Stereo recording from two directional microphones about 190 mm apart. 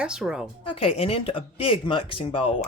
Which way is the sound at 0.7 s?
30° left (ahead or behind).